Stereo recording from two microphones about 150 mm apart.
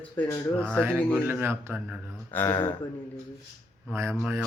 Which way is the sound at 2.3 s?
15° left (ahead or behind).